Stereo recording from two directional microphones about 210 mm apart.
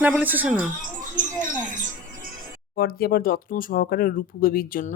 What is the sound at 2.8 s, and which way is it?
Speech, 45° left (ahead or behind).